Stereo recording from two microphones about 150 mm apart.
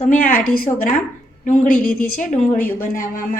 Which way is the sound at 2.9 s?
65° left (ahead or behind).